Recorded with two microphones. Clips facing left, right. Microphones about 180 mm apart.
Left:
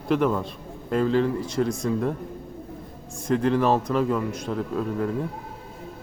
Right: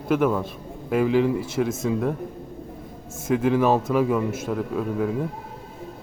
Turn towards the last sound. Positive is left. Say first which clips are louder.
# right 1 dB
turn(degrees=-5)  # may be behind; listen again after turning